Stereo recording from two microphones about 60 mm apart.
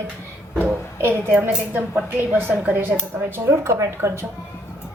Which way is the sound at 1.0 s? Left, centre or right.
Right.